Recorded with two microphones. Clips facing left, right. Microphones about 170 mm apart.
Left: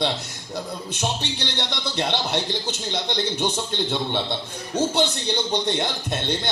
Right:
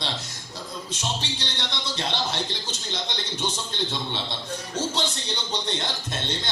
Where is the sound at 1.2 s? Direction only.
60° left (ahead or behind).